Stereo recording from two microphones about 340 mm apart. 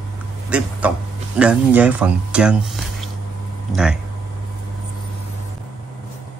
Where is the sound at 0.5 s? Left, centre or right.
Centre.